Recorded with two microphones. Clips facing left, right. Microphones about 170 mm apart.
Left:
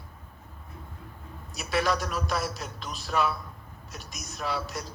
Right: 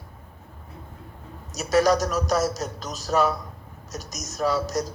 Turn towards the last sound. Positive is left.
turn(degrees=-40)  # may be behind; listen again after turning